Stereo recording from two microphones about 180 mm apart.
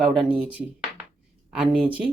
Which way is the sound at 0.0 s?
5° right (ahead or behind).